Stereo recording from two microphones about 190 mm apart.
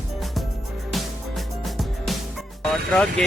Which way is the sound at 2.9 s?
Centre (ahead or behind).